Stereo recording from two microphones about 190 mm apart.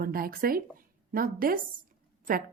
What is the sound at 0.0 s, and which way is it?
A woman's voice, 50° right (ahead or behind).